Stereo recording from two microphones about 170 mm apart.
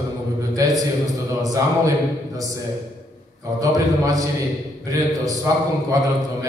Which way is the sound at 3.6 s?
20° right (ahead or behind).